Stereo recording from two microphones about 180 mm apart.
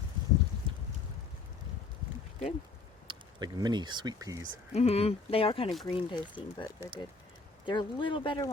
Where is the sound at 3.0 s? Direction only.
25° right (ahead or behind).